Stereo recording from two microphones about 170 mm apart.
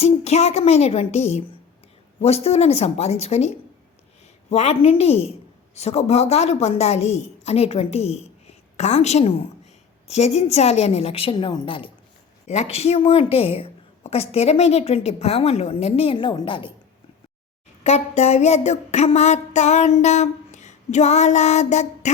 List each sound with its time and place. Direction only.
0.0 s a woman's voice: 40° left (ahead or behind)
17.8 s a woman's voice: 40° left (ahead or behind)